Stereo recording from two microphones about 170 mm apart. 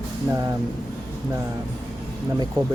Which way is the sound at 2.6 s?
25° right (ahead or behind).